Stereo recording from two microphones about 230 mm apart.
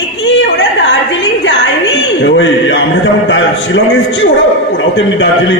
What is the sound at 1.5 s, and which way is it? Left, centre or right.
A man's voice, left.